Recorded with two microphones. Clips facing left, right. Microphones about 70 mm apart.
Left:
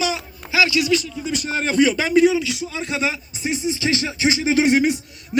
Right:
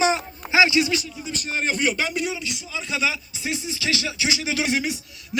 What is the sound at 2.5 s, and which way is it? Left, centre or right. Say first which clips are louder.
Speech: left 4 dB; left.